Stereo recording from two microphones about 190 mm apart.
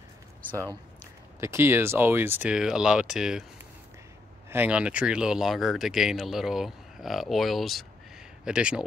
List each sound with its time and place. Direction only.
1.4 s speech: 15° right (ahead or behind)
4.5 s speech: 10° right (ahead or behind)